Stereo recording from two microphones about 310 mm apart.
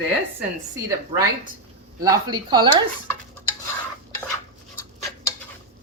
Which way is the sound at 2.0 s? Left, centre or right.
Centre.